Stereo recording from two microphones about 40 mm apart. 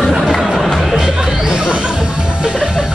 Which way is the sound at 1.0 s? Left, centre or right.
Centre.